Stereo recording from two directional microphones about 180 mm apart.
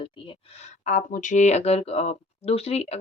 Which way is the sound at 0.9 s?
45° left (ahead or behind).